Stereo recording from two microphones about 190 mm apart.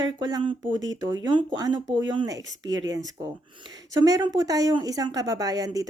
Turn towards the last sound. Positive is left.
turn(degrees=-20)  # may be behind; listen again after turning